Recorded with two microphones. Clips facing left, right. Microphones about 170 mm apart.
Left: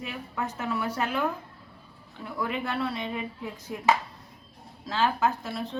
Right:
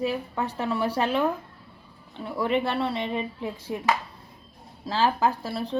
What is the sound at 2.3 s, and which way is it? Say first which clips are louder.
Speech: right 6 dB; 25° right (ahead or behind).